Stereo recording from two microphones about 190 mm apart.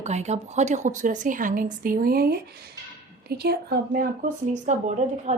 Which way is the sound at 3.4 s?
55° right (ahead or behind).